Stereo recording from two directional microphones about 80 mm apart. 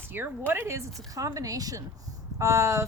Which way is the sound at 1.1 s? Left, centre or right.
Right.